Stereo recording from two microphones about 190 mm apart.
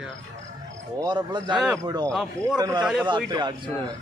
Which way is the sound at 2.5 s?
20° right (ahead or behind).